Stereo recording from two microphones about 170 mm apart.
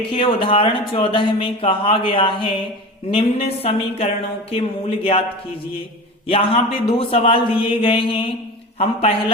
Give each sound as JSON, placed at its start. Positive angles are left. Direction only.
{"t": 0.1, "sound": "speech", "side_deg": 30}
{"t": 6.2, "sound": "speech", "side_deg": 35}